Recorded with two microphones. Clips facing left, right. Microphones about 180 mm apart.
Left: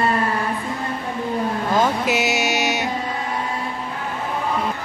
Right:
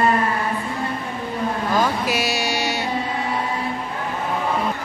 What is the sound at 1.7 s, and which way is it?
Vehicle, 20° left (ahead or behind).